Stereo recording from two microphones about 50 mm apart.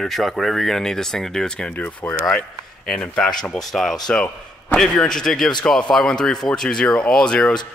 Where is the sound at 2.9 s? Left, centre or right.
Centre.